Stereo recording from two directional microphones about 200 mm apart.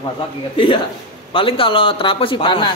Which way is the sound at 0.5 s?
25° left (ahead or behind).